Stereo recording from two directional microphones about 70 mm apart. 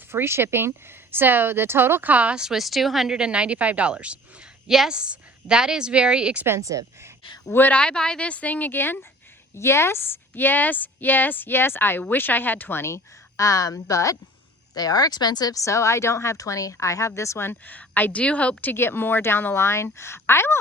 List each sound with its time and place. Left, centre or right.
0.1 s a woman's voice: right; by 3.2 s centre
3.2 s a woman's voice: centre
6.6 s speech: right
7.5 s speech: left
7.8 s a woman's voice: centre; by 14.2 s left
14.8 s speech: left
15.5 s a woman's voice: left
17.7 s a woman's voice: left